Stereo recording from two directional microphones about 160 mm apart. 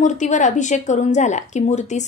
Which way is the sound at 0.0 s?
50° left (ahead or behind).